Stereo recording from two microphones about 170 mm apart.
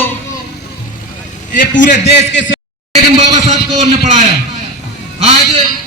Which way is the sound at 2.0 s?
85° left.